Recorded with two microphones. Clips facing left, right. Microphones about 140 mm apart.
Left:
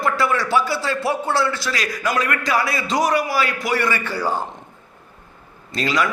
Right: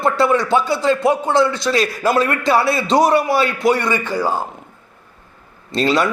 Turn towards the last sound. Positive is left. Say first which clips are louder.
# right 5 dB
turn(degrees=-30)  # may be behind; listen again after turning